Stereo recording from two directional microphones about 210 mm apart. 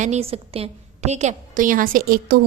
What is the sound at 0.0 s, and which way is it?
A woman's voice, 30° right (ahead or behind).